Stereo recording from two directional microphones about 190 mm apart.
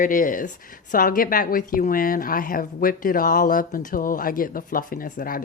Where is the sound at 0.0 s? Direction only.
45° left (ahead or behind).